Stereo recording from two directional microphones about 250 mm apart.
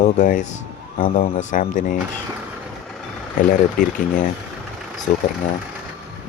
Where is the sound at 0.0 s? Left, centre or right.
Left.